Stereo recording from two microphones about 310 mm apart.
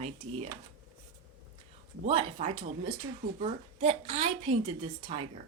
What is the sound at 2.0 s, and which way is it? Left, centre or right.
Speech, centre.